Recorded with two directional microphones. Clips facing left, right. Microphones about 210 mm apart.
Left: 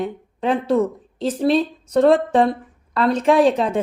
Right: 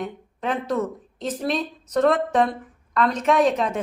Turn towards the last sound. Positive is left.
turn(degrees=30)  # may be behind; listen again after turning